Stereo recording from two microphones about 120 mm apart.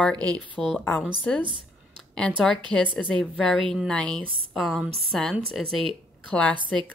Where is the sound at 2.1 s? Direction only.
5° left (ahead or behind).